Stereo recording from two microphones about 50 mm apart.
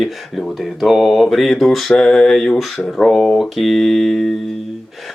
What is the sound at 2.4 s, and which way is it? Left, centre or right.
Mantra, centre.